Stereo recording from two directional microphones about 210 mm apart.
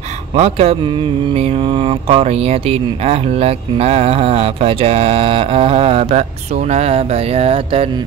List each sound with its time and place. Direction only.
0.3 s mantra: 30° right (ahead or behind)